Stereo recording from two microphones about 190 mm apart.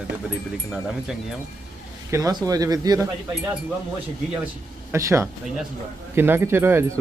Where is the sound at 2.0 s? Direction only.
15° right (ahead or behind).